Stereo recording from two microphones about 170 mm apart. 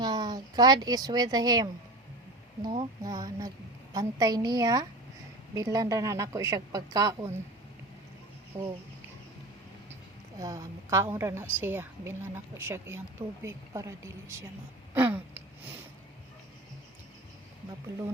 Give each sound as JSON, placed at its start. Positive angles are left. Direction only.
{"t": 0.0, "sound": "a woman's voice", "side_deg": -25}
{"t": 8.5, "sound": "speech", "side_deg": -40}
{"t": 10.3, "sound": "a woman's voice", "side_deg": -20}